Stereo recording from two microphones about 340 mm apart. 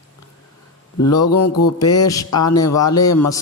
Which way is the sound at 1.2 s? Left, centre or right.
Left.